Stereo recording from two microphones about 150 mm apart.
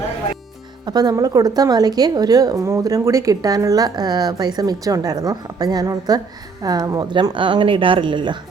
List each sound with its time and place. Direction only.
0.9 s a woman's voice: 25° right (ahead or behind)